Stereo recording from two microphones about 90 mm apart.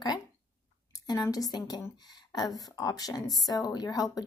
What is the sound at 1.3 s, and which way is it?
Speech, 45° left (ahead or behind).